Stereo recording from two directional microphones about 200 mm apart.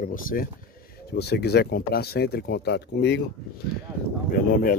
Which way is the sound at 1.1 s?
55° left (ahead or behind).